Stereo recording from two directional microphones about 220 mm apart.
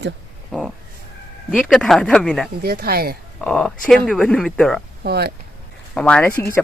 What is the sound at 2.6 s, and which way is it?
Speech, 45° right (ahead or behind).